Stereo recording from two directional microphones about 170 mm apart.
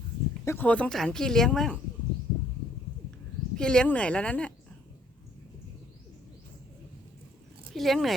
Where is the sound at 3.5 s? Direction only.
5° left (ahead or behind).